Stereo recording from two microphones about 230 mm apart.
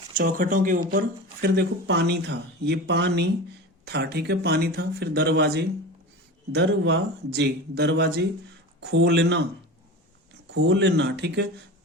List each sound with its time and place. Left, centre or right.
0.1 s speech: right
10.4 s speech: right